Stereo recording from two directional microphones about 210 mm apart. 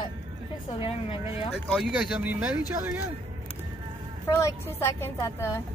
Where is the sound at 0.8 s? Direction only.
25° left (ahead or behind).